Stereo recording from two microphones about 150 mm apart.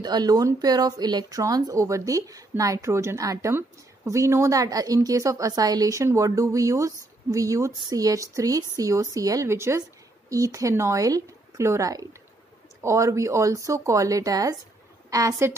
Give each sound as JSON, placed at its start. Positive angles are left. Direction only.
{"t": 0.0, "sound": "a woman's voice", "side_deg": -25}